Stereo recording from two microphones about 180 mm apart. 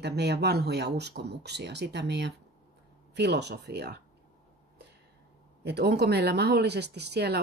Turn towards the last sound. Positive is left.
turn(degrees=-65)  # may be behind; listen again after turning